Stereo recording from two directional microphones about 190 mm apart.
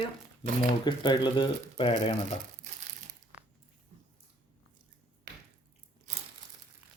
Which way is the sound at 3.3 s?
5° right (ahead or behind).